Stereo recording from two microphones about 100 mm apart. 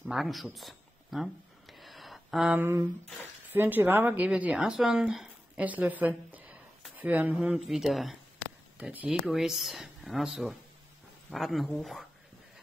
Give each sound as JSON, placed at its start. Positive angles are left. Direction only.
{"t": 0.0, "sound": "a sound", "side_deg": 0}
{"t": 2.5, "sound": "speech", "side_deg": -20}
{"t": 5.6, "sound": "speech", "side_deg": -15}
{"t": 7.3, "sound": "speech", "side_deg": -5}
{"t": 8.7, "sound": "speech", "side_deg": -10}